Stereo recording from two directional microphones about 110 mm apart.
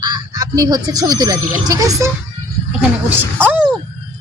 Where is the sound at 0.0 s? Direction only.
35° right (ahead or behind).